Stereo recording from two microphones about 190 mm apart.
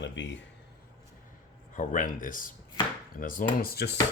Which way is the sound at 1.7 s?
40° left (ahead or behind).